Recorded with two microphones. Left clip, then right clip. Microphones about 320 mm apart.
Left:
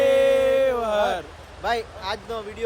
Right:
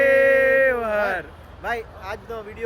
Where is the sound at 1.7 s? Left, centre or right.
Left.